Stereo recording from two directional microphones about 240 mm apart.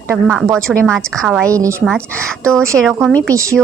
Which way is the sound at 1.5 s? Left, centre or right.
Centre.